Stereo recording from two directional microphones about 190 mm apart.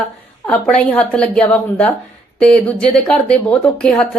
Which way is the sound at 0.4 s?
5° left (ahead or behind).